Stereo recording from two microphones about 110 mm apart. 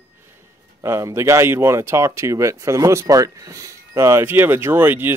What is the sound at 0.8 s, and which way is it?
Speech, 25° right (ahead or behind).